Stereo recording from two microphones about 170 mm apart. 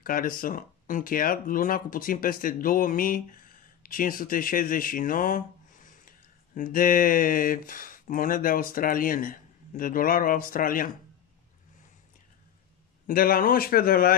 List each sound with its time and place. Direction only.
0.0 s speech: 55° left (ahead or behind)
13.0 s speech: 60° left (ahead or behind)